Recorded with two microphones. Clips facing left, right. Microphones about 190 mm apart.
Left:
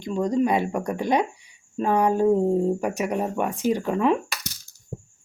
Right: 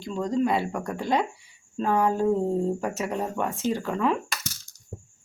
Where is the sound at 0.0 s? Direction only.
15° left (ahead or behind).